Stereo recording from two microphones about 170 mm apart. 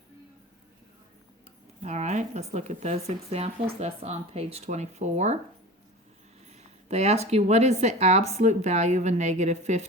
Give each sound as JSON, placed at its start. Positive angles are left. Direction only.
{"t": 1.8, "sound": "speech", "side_deg": -40}
{"t": 6.5, "sound": "a woman's voice", "side_deg": -40}